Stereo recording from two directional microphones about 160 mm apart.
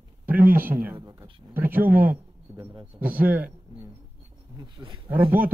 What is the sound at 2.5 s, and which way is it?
Wild animals, 20° right (ahead or behind).